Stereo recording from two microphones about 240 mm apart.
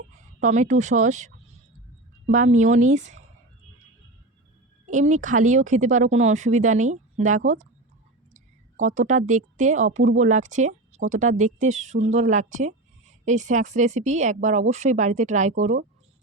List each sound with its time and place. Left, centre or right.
0.3 s speech: right
4.9 s speech: right
8.3 s clicking: right
9.0 s speech: right